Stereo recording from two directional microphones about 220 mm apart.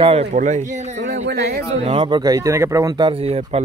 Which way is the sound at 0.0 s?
25° right (ahead or behind).